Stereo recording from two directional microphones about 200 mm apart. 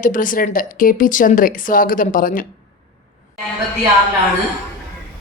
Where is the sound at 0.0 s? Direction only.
40° left (ahead or behind).